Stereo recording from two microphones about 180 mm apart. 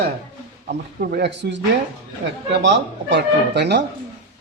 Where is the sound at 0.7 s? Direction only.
70° right (ahead or behind).